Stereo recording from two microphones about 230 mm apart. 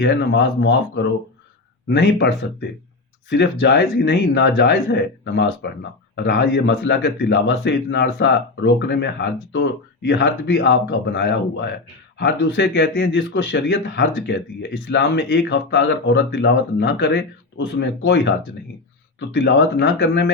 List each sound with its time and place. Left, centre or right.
0.0 s speech: left